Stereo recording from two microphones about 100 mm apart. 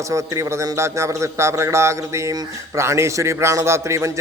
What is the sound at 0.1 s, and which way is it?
A man's voice, 30° right (ahead or behind).